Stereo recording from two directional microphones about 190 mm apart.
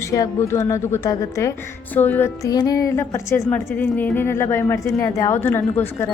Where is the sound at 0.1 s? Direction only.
15° left (ahead or behind).